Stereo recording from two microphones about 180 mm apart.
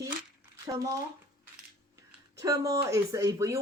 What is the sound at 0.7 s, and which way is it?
Speech, 15° right (ahead or behind).